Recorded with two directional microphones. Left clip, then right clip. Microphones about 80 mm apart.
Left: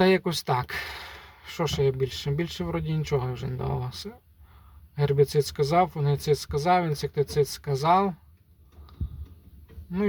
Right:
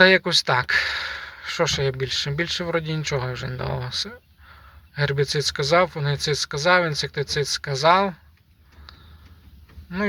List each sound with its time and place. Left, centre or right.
0.0 s speech: left